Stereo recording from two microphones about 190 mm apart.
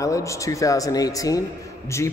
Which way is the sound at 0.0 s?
15° left (ahead or behind).